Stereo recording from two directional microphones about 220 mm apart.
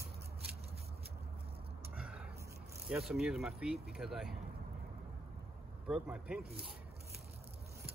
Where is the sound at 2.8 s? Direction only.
Centre (ahead or behind).